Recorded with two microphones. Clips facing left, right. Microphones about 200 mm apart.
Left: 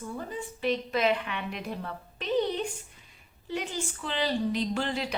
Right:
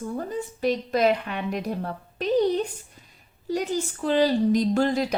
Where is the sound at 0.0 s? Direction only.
45° right (ahead or behind).